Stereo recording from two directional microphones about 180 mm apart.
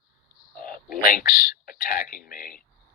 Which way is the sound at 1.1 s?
50° left (ahead or behind).